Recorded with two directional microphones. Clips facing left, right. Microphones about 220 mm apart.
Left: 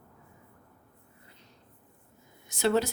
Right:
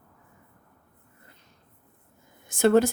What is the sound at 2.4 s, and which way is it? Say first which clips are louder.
Speech: right 7 dB; 50° right (ahead or behind).